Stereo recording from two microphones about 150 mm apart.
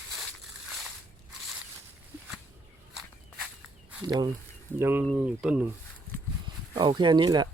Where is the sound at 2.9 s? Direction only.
Centre (ahead or behind).